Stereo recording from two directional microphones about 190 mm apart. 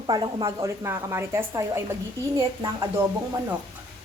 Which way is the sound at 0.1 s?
25° right (ahead or behind).